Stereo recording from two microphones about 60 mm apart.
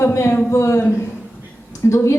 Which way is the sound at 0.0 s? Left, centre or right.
Left.